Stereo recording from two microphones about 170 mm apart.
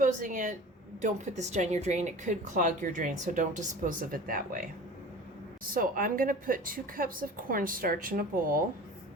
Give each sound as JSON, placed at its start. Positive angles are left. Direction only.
{"t": 0.0, "sound": "speech", "side_deg": -50}